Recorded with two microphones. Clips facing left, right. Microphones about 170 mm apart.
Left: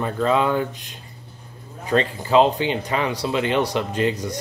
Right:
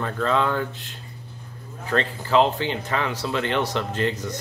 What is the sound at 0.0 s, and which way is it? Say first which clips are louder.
Speech: left 3 dB; 15° left (ahead or behind).